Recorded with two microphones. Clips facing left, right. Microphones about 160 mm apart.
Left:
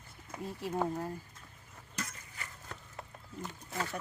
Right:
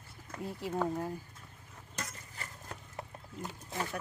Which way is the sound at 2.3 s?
40° right (ahead or behind).